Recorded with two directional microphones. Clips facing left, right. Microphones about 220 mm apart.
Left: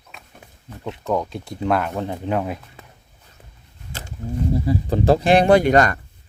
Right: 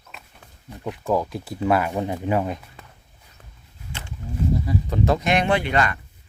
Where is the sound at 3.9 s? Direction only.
40° left (ahead or behind).